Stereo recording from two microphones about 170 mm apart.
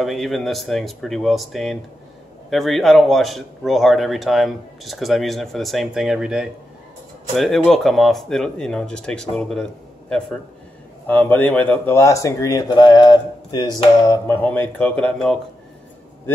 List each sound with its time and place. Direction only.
0.0 s speech: centre (ahead or behind)